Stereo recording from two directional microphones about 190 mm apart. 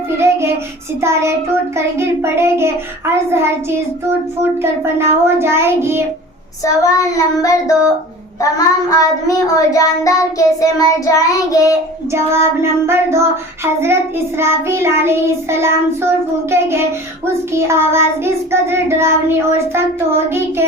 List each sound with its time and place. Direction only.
0.2 s child singing: 15° right (ahead or behind)
6.8 s child singing: 15° left (ahead or behind)
8.9 s child singing: 15° left (ahead or behind)
12.1 s child singing: 15° right (ahead or behind)